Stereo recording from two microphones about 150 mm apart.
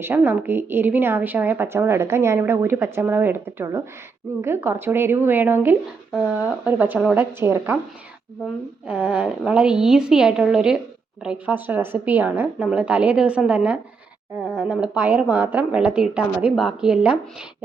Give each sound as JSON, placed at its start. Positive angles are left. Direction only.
{"t": 0.0, "sound": "a woman's voice", "side_deg": -15}
{"t": 8.9, "sound": "a woman's voice", "side_deg": -10}